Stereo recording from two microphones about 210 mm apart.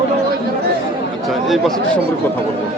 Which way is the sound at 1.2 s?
Centre (ahead or behind).